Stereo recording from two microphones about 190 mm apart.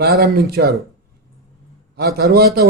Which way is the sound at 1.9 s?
55° right (ahead or behind).